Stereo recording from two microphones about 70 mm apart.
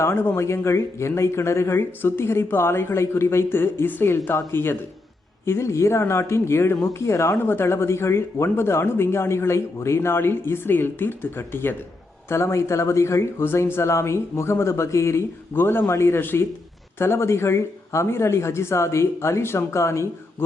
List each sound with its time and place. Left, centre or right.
0.0 s speech: left
7.3 s speech: left